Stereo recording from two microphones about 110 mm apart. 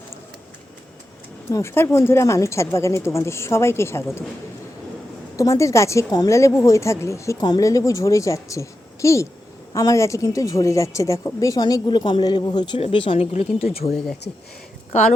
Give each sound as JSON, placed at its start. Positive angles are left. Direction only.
{"t": 1.5, "sound": "a woman's voice", "side_deg": 25}
{"t": 5.4, "sound": "a woman's voice", "side_deg": 30}
{"t": 12.8, "sound": "speech", "side_deg": 50}
{"t": 13.1, "sound": "speech", "side_deg": 75}